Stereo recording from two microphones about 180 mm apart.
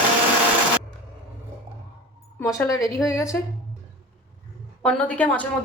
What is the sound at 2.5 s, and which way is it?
Speech, 20° left (ahead or behind).